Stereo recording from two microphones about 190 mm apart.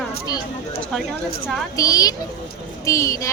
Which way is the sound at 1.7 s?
20° left (ahead or behind).